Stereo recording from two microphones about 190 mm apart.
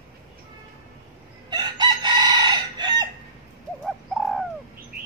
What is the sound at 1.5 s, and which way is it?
Chicken, 20° right (ahead or behind).